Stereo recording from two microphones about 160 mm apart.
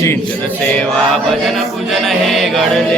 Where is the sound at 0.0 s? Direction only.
15° left (ahead or behind).